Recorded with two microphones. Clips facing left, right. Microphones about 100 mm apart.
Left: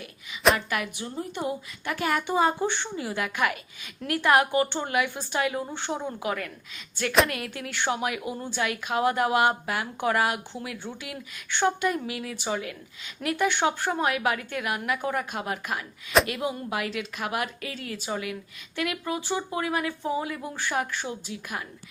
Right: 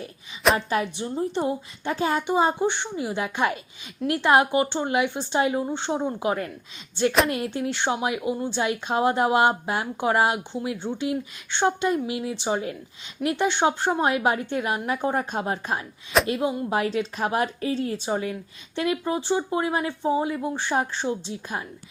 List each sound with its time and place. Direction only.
0.5 s a woman's voice: 30° right (ahead or behind)